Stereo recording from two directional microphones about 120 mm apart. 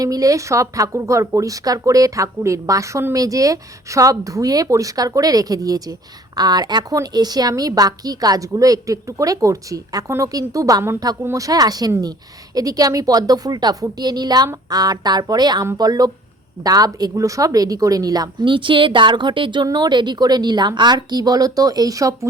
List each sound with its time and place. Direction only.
0.0 s a woman's voice: 30° right (ahead or behind)